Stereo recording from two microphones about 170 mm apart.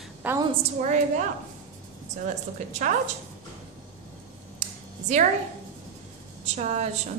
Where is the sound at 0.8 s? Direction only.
45° right (ahead or behind).